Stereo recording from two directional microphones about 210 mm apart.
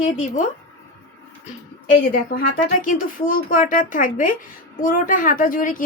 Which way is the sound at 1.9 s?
40° left (ahead or behind).